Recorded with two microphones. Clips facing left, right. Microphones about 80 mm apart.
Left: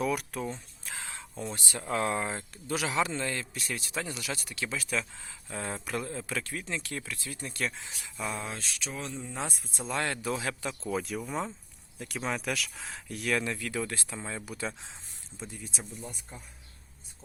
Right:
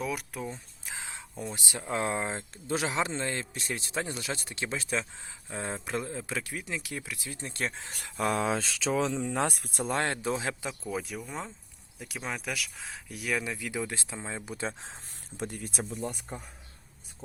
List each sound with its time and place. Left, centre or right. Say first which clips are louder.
0.0 s speech: left 3 dB; centre
0.9 s speech: even; centre
7.9 s speech: right 6 dB; right
9.9 s speech: right 1 dB; right
10.9 s speech: left 6 dB; centre; by 14.8 s right
15.4 s speech: right 6 dB; right